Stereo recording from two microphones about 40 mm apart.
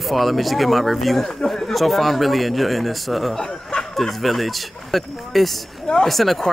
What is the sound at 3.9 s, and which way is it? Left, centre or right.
Speech, centre.